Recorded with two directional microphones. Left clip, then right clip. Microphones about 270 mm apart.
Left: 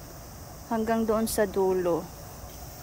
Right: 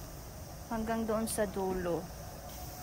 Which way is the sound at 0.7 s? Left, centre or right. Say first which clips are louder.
Left 8 dB; left.